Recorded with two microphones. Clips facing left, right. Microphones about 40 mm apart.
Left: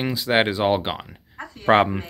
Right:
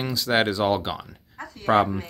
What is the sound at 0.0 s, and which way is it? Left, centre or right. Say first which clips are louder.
Speech: left 2 dB; left.